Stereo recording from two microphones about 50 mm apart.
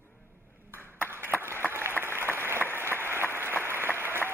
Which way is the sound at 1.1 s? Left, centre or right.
Right.